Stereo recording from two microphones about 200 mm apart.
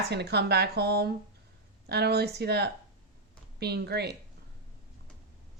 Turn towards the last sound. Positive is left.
turn(degrees=-55)  # may be behind; listen again after turning